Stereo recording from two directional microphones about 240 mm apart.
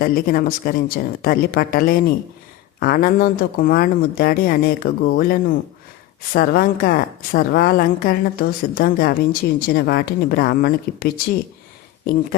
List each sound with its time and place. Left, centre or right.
0.0 s speech: left